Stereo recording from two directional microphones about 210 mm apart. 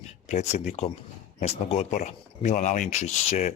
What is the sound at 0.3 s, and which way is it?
Speech, 35° left (ahead or behind).